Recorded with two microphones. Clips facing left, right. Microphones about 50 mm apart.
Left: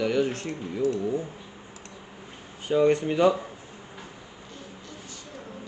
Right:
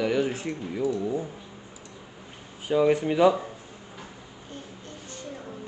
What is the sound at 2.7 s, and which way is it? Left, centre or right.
Speech, centre.